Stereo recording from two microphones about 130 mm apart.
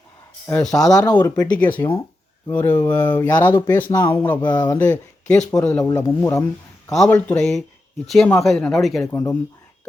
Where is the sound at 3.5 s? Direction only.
35° left (ahead or behind).